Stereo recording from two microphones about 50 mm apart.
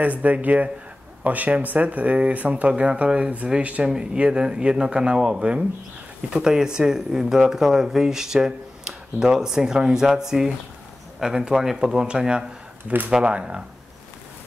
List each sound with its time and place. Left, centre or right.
0.0 s speech: right
3.9 s speech: centre